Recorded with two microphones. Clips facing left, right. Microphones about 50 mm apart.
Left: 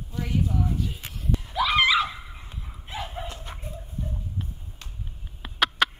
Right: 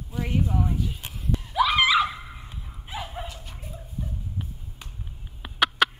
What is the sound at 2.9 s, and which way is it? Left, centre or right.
Dog, centre.